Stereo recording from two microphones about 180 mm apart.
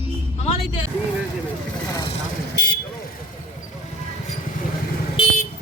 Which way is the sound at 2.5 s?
60° left (ahead or behind).